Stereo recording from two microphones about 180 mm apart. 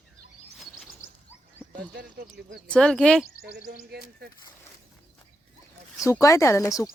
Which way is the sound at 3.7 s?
60° right (ahead or behind).